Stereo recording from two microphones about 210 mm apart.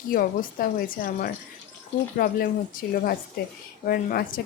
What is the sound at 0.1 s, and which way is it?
Speech, 45° left (ahead or behind).